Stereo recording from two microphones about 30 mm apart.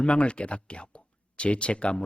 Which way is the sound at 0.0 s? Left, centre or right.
Left.